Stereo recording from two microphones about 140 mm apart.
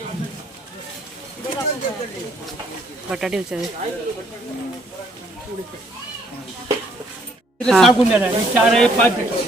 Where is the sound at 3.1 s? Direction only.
5° right (ahead or behind).